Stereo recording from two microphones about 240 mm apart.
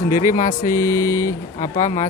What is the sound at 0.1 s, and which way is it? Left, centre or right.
Speech, left.